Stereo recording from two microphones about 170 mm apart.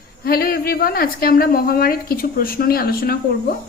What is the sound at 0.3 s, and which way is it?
A woman's voice, 60° left (ahead or behind).